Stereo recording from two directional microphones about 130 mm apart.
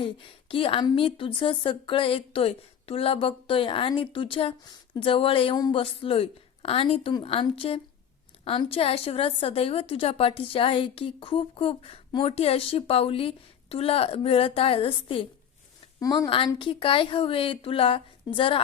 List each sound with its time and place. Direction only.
0.0 s a woman's voice: 45° left (ahead or behind)
16.0 s a woman's voice: 30° left (ahead or behind)